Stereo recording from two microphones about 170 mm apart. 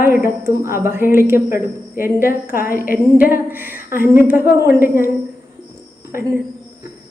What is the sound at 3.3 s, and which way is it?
A woman's voice, 10° right (ahead or behind).